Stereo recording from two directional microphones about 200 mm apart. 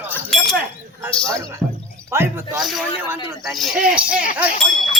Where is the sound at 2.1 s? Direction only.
15° right (ahead or behind).